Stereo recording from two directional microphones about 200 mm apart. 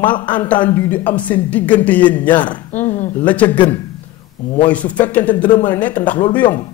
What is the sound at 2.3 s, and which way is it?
Speech, 20° left (ahead or behind).